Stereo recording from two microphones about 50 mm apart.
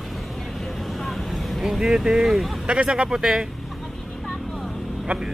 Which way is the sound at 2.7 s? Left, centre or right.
Centre.